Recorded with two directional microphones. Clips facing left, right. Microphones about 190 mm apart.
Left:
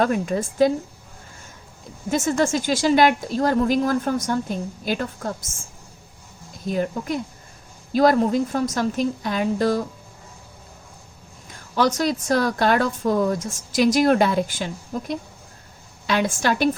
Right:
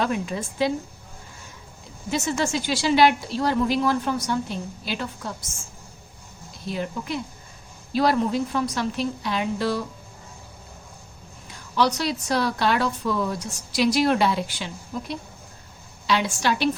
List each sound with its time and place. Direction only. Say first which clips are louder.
0.0 s speech: left 5 dB; 45° left (ahead or behind)
2.0 s speech: left 4 dB; 50° left (ahead or behind)
6.7 s speech: left 5 dB; 45° left (ahead or behind)
11.8 s speech: left 3 dB; 45° left (ahead or behind)